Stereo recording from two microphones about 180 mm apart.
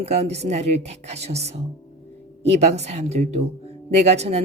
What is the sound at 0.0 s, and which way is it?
Speech, 35° right (ahead or behind).